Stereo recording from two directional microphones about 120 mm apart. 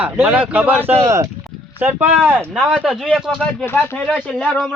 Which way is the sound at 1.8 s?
15° right (ahead or behind).